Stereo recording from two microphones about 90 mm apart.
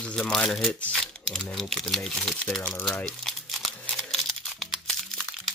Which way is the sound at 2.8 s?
5° left (ahead or behind).